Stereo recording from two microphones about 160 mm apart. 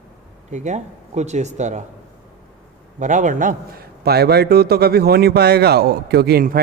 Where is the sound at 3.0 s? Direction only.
50° right (ahead or behind).